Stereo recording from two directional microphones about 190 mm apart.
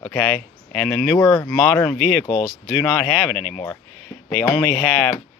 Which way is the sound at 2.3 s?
25° left (ahead or behind).